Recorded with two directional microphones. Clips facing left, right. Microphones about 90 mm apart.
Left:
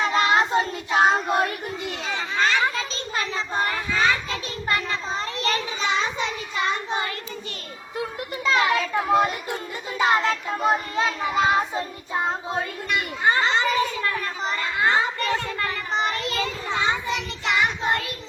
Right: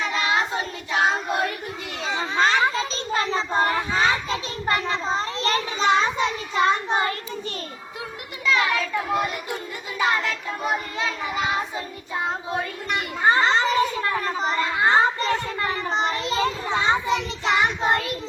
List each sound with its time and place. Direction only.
0.0 s child singing: 35° left (ahead or behind)
2.0 s a sound: 30° right (ahead or behind)
8.4 s children playing: 30° left (ahead or behind)
10.0 s child singing: 30° left (ahead or behind)
13.2 s children playing: 35° right (ahead or behind)
15.5 s child singing: 20° right (ahead or behind)
16.6 s child singing: 35° right (ahead or behind)
17.8 s a sound: 35° right (ahead or behind)